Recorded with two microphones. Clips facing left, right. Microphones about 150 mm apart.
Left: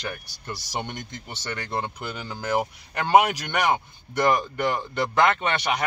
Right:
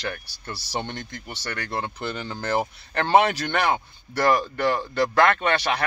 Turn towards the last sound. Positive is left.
turn(degrees=20)  # may be behind; listen again after turning